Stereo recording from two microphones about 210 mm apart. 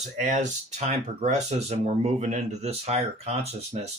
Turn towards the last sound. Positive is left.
turn(degrees=-30)  # may be behind; listen again after turning